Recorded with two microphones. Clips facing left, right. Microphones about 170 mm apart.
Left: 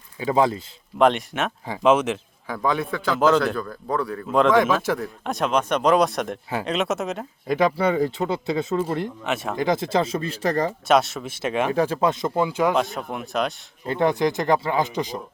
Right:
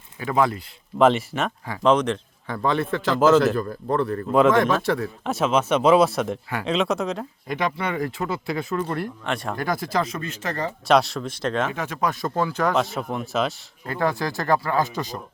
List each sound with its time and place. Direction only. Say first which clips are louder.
0.2 s speech: left 2 dB; 25° left (ahead or behind)
0.9 s a man's voice: right 1 dB; centre (ahead or behind)
7.4 s speech: left 6 dB; 30° left (ahead or behind)
9.2 s a man's voice: left 1 dB; 5° left (ahead or behind)
9.6 s speech: left 5 dB; 20° left (ahead or behind)
10.8 s a man's voice: right 3 dB; centre (ahead or behind)
11.7 s a man's voice: left 6 dB; 30° left (ahead or behind); by 12.7 s 15° left (ahead or behind)
12.7 s a man's voice: even; centre (ahead or behind)
13.8 s speech: left 4 dB; 20° left (ahead or behind)